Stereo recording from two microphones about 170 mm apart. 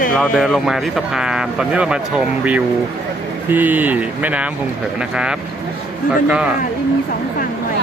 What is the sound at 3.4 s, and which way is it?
Speech, 10° right (ahead or behind).